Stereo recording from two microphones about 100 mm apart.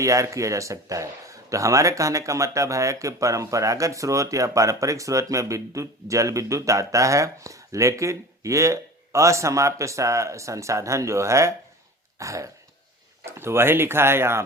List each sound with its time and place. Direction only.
0.0 s speech: 30° right (ahead or behind)